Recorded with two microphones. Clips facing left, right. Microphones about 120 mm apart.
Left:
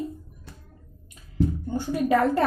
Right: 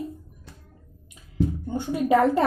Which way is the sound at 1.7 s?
20° right (ahead or behind).